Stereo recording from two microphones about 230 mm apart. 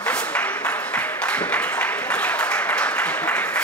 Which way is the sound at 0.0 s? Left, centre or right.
Centre.